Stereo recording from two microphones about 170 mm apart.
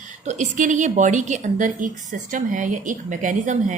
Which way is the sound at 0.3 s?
45° right (ahead or behind).